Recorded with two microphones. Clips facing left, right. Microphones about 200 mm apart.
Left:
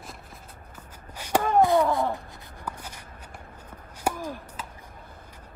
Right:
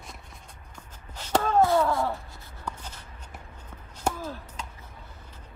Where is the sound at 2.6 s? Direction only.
10° left (ahead or behind).